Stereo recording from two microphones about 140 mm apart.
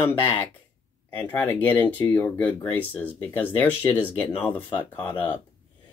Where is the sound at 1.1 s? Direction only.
10° left (ahead or behind).